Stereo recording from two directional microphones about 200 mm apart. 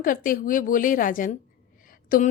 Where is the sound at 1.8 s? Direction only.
45° left (ahead or behind).